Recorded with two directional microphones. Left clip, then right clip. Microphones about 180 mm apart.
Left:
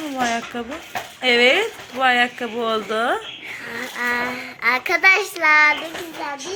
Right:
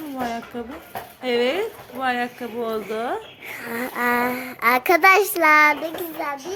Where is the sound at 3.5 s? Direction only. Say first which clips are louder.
Right 4 dB; 70° right (ahead or behind).